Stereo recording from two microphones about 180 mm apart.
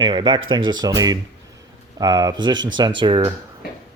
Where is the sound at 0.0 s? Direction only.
25° right (ahead or behind).